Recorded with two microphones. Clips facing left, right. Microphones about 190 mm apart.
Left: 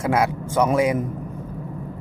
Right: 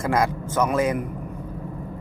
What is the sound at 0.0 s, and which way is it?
Speech, 10° left (ahead or behind).